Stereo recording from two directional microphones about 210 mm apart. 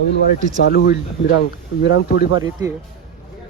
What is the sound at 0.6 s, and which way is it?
Speech, 50° left (ahead or behind).